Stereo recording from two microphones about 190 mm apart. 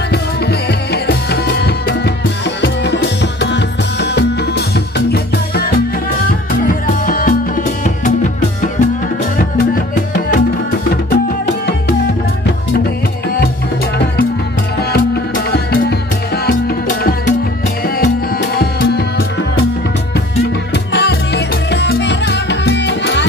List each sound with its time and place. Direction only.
0.1 s music: 55° left (ahead or behind)
6.6 s music: 45° left (ahead or behind)
14.8 s music: 55° left (ahead or behind)
17.8 s music: 55° left (ahead or behind)
20.7 s music: 60° left (ahead or behind)